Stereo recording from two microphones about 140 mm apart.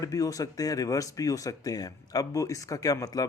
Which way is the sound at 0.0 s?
25° left (ahead or behind).